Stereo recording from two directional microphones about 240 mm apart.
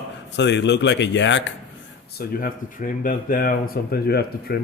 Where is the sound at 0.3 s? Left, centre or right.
Left.